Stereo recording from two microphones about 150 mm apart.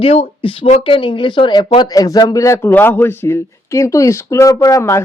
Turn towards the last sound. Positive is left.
turn(degrees=20)  # may be behind; listen again after turning